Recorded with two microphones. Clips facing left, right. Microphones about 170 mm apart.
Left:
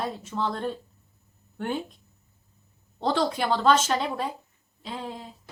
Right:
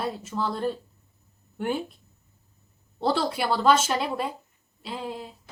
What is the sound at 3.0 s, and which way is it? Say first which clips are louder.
A woman's voice: even; 5° right (ahead or behind).